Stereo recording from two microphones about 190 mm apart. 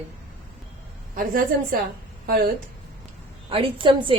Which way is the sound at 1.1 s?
45° right (ahead or behind).